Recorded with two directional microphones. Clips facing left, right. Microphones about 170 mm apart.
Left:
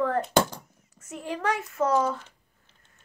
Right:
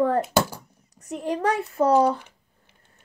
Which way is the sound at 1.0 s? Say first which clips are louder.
Right 6 dB; 35° right (ahead or behind).